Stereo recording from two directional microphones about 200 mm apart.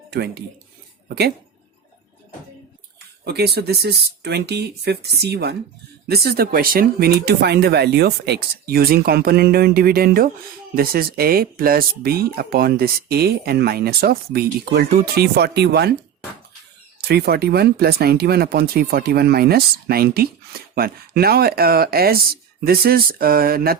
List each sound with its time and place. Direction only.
0.1 s speech: 55° right (ahead or behind)
3.2 s speech: 55° right (ahead or behind)
17.0 s speech: 55° right (ahead or behind)